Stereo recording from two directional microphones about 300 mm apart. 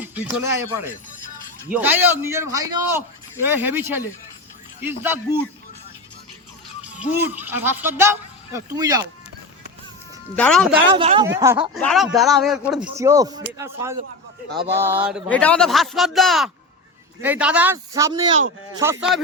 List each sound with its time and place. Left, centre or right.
0.0 s speech: centre
7.2 s speech: centre
10.3 s speech: centre
10.9 s speech: centre